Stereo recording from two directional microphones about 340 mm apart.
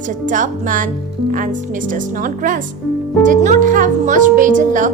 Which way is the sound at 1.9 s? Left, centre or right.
Right.